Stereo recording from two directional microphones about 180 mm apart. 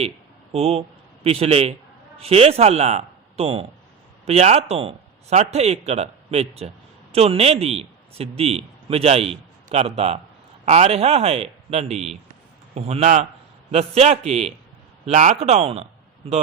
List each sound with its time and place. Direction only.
0.5 s a man's voice: 35° right (ahead or behind)